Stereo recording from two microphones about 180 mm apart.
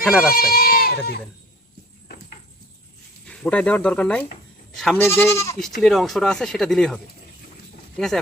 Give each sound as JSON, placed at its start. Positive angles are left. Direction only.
{"t": 0.0, "sound": "speech", "side_deg": 0}
{"t": 0.3, "sound": "speech", "side_deg": 55}
{"t": 3.2, "sound": "speech", "side_deg": 5}
{"t": 5.8, "sound": "speech", "side_deg": 0}